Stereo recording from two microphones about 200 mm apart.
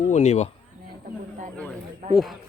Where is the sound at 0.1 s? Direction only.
35° left (ahead or behind).